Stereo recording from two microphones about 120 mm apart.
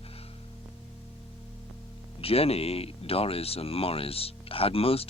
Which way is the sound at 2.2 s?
55° left (ahead or behind).